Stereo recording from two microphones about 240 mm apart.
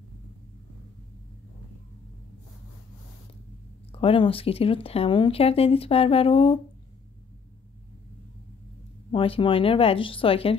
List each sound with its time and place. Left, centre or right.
3.9 s speech: left
9.1 s speech: left